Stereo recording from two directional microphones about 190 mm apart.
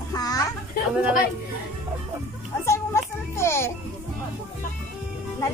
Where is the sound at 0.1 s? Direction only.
20° left (ahead or behind).